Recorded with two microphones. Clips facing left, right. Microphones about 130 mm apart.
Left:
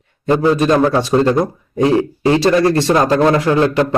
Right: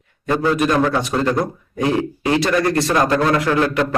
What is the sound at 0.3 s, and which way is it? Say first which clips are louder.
A man's voice: left 5 dB; 30° left (ahead or behind).